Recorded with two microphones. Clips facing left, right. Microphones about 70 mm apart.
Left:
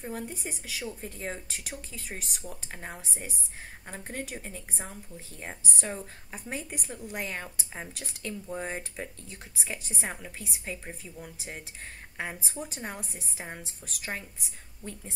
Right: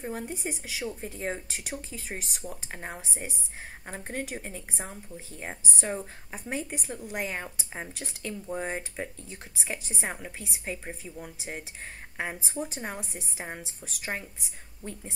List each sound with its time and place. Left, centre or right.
0.0 s a woman's voice: centre